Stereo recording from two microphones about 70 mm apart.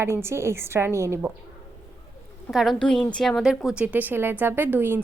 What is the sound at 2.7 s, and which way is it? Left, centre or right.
A woman's voice, centre.